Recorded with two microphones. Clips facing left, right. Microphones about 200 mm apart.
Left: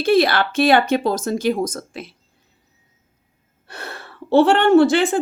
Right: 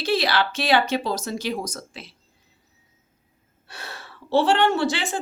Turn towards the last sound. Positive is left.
turn(degrees=55)  # may be behind; listen again after turning